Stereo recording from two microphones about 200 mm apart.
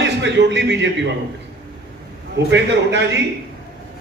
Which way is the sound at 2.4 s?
60° right (ahead or behind).